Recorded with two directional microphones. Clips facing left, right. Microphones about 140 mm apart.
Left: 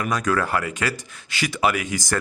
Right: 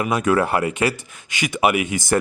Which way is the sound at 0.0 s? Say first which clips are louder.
Right 4 dB; 25° right (ahead or behind).